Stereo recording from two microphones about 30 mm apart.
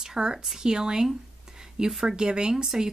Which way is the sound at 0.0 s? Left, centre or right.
Right.